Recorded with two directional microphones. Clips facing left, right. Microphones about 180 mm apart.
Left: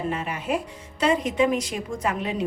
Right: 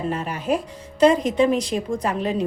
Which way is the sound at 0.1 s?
40° right (ahead or behind).